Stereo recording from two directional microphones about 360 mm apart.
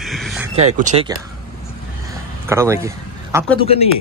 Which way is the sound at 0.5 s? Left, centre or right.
Centre.